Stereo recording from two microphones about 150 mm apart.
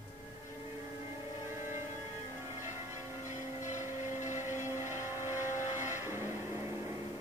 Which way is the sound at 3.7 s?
15° right (ahead or behind).